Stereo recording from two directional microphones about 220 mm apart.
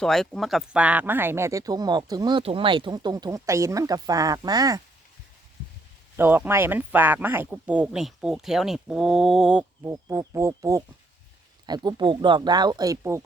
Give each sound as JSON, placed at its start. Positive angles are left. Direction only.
{"t": 0.0, "sound": "speech", "side_deg": 0}
{"t": 6.1, "sound": "speech", "side_deg": -10}